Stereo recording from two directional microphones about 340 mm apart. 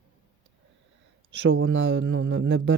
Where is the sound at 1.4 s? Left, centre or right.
Right.